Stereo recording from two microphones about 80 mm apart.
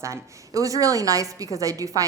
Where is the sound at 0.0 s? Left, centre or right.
Right.